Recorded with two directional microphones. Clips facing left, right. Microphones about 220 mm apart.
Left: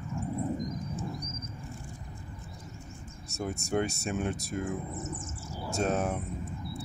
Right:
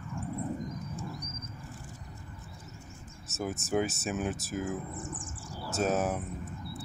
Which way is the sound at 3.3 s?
5° right (ahead or behind).